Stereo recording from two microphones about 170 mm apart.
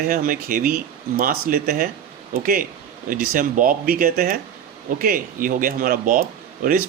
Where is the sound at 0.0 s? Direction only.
55° right (ahead or behind).